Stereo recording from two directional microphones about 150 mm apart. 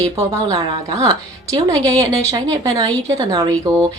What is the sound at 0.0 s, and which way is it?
A woman's voice, 20° right (ahead or behind).